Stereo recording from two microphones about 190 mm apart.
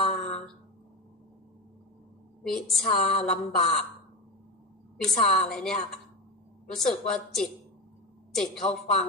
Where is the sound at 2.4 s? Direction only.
Centre (ahead or behind).